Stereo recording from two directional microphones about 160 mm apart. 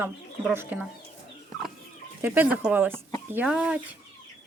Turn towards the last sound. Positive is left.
turn(degrees=-5)  # may be behind; listen again after turning